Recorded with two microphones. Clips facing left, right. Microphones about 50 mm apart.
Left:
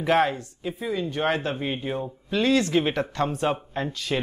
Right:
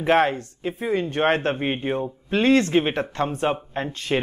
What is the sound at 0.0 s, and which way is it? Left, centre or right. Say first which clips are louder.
Speech: right 3 dB; right.